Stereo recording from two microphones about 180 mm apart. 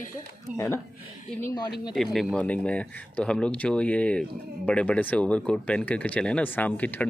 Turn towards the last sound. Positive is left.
turn(degrees=10)  # may be behind; listen again after turning